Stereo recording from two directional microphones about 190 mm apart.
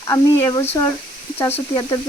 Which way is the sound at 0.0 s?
15° left (ahead or behind).